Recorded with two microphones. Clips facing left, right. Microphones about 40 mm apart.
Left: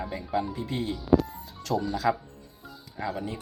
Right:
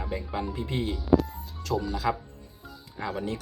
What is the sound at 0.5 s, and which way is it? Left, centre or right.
Speech, right.